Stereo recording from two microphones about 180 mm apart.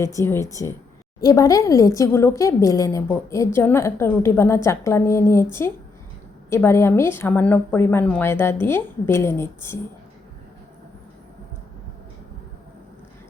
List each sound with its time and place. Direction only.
0.2 s a woman's voice: 15° left (ahead or behind)